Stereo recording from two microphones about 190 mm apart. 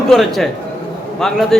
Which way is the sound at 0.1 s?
Centre (ahead or behind).